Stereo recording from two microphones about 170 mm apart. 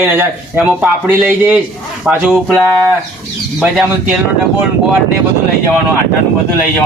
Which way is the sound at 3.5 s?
5° right (ahead or behind).